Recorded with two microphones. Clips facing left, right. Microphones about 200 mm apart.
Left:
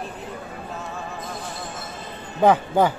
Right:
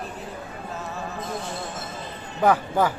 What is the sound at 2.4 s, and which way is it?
Speech, 20° left (ahead or behind).